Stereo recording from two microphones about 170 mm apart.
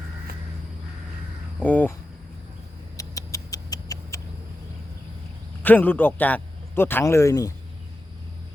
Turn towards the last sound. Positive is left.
turn(degrees=20)  # may be behind; listen again after turning